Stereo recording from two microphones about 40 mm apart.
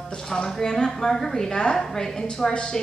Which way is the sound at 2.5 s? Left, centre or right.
Left.